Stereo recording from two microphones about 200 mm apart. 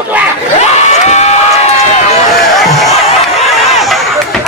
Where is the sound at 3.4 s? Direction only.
Centre (ahead or behind).